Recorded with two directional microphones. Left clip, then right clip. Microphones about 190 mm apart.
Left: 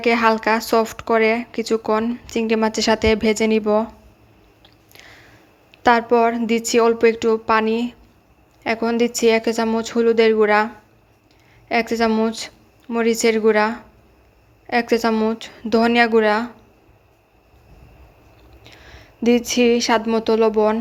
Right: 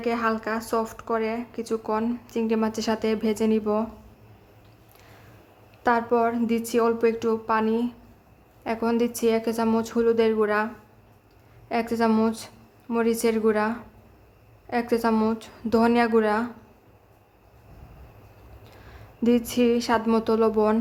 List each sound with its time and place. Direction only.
0.0 s speech: 20° left (ahead or behind)
5.8 s a woman's voice: 15° left (ahead or behind)
11.7 s a woman's voice: 15° left (ahead or behind)
18.6 s a sound: 10° left (ahead or behind)
20.1 s a woman's voice: 10° left (ahead or behind)